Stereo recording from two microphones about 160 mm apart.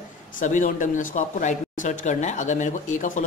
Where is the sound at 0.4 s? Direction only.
55° left (ahead or behind).